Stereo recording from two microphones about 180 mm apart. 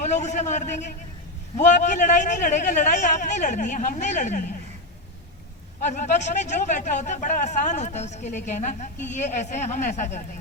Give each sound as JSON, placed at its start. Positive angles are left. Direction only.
{"t": 0.0, "sound": "speech", "side_deg": 40}
{"t": 5.8, "sound": "speech", "side_deg": 45}